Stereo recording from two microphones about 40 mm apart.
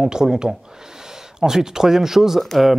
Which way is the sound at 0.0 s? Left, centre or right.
Centre.